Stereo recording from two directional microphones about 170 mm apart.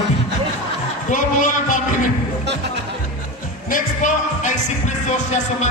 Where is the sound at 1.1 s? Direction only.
50° left (ahead or behind).